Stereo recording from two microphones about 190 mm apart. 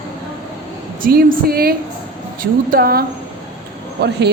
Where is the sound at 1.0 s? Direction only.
50° right (ahead or behind).